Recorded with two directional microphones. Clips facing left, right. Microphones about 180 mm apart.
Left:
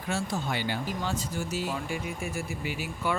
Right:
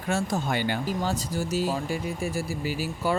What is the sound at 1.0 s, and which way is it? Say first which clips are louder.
Speech: right 4 dB; 40° right (ahead or behind).